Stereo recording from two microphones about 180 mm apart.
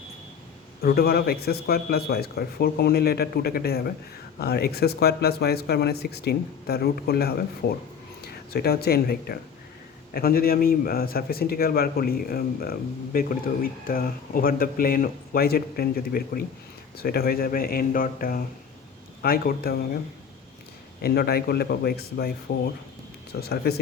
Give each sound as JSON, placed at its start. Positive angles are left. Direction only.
{"t": 0.8, "sound": "a man's voice", "side_deg": 60}
{"t": 21.0, "sound": "a man's voice", "side_deg": 60}